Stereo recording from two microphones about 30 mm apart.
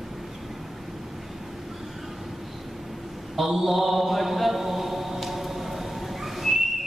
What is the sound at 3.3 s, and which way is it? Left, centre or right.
Mantra, centre.